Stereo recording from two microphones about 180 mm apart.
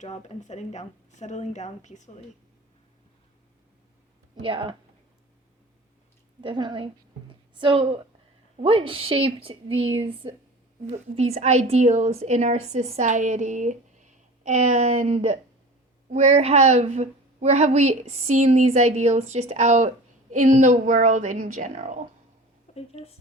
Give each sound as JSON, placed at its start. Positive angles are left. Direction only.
{"t": 0.0, "sound": "speech", "side_deg": 40}
{"t": 4.4, "sound": "a woman's voice", "side_deg": -30}
{"t": 6.4, "sound": "a woman's voice", "side_deg": -25}
{"t": 7.3, "sound": "a sound", "side_deg": -25}
{"t": 8.6, "sound": "a woman's voice", "side_deg": -30}
{"t": 22.7, "sound": "a sound", "side_deg": 40}